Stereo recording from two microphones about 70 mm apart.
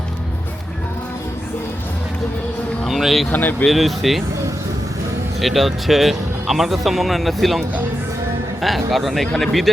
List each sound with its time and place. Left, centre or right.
2.8 s speech: centre
3.2 s speech: left
3.7 s speech: centre
5.4 s speech: centre
8.6 s speech: centre